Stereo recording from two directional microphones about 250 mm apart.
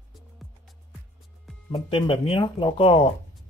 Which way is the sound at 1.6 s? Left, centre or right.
Left.